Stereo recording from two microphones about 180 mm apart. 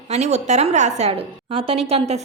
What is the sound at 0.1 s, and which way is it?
A woman's voice, 40° right (ahead or behind).